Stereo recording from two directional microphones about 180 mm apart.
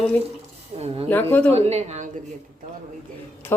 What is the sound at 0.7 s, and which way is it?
Speech, 35° right (ahead or behind).